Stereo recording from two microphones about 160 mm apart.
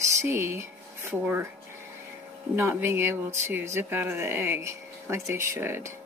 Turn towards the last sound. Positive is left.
turn(degrees=-15)  # may be behind; listen again after turning